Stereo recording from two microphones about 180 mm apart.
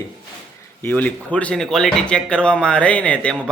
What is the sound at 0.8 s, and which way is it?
Speech, 10° left (ahead or behind).